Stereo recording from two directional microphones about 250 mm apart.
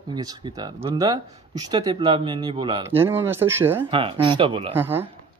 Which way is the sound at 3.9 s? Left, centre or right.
Centre.